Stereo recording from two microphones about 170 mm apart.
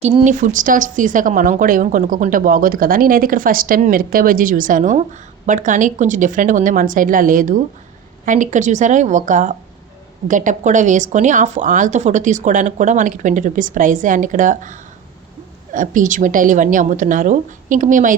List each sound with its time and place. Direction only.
0.3 s a woman's voice: 50° right (ahead or behind)